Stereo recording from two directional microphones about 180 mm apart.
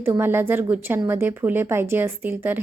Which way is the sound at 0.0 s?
10° right (ahead or behind).